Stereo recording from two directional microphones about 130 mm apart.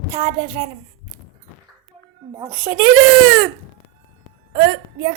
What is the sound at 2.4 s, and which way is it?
Speech, 15° right (ahead or behind).